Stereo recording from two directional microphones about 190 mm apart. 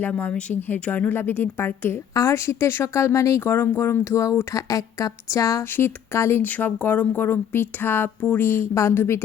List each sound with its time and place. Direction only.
0.0 s a woman's voice: 5° left (ahead or behind)